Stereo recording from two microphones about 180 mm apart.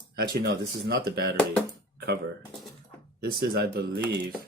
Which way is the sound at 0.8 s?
60° right (ahead or behind).